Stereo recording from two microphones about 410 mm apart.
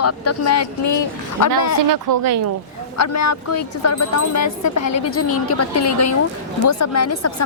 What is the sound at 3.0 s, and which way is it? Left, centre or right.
A woman's voice, left.